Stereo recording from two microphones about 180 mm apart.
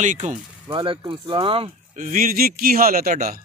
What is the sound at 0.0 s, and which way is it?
Speech, 45° right (ahead or behind).